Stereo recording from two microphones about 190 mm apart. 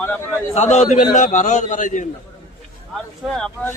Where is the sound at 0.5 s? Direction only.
35° left (ahead or behind).